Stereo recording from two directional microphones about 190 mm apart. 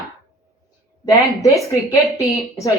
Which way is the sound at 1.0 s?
15° left (ahead or behind).